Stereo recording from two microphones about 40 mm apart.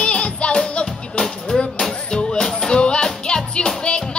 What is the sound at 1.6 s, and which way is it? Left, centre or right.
Music, left.